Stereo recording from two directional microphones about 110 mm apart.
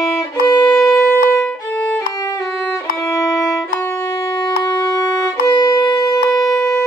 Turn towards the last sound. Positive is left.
turn(degrees=5)  # may be behind; listen again after turning